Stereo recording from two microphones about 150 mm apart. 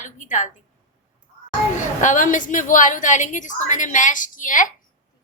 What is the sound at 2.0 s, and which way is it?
A woman's voice, 55° left (ahead or behind).